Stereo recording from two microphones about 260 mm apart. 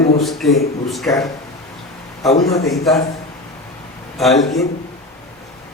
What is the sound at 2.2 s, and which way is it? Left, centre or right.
Speech, centre.